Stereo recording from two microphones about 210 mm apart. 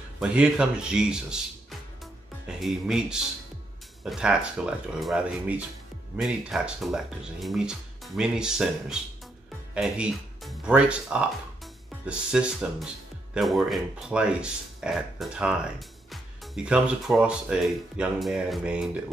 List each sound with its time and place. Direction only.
0.2 s speech: 5° right (ahead or behind)